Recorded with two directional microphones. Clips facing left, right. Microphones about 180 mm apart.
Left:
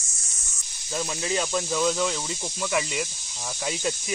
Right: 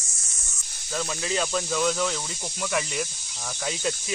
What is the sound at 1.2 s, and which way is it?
Speech, 25° left (ahead or behind).